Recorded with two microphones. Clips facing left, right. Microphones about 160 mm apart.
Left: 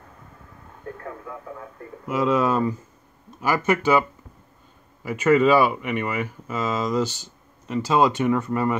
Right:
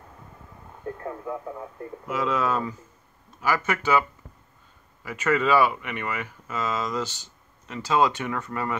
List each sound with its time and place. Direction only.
1.0 s speech: 15° right (ahead or behind)
2.0 s speech: 15° left (ahead or behind)
5.2 s speech: 10° left (ahead or behind)